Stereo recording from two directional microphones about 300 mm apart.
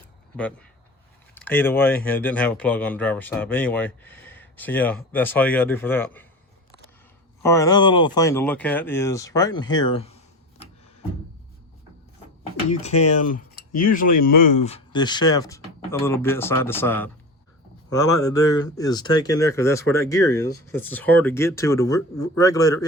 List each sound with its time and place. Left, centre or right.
1.4 s speech: centre
7.4 s speech: centre
13.2 s a sound: left
13.8 s speech: left; by 22.8 s centre